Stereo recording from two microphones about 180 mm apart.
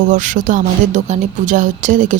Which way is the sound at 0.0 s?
45° right (ahead or behind).